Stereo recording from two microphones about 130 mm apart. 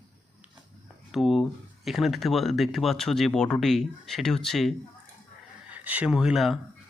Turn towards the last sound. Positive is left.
turn(degrees=0)  # may be behind; listen again after turning